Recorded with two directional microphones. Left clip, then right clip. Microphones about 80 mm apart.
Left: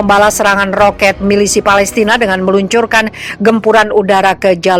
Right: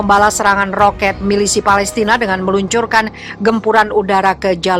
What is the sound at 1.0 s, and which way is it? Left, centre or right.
A woman's voice, left.